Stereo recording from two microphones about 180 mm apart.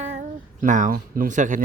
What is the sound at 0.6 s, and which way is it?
Speech, 45° right (ahead or behind).